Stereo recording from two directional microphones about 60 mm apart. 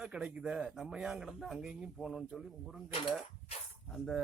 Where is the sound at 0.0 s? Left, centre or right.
Centre.